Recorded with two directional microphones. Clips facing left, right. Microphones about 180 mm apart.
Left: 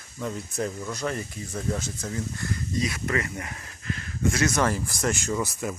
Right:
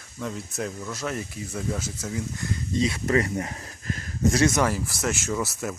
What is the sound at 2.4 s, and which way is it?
Speech, 25° right (ahead or behind).